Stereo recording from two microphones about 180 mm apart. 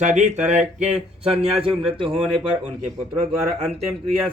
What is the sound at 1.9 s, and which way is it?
Speech, 30° right (ahead or behind).